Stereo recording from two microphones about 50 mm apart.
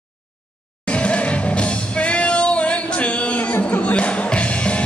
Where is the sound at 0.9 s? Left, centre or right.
Left.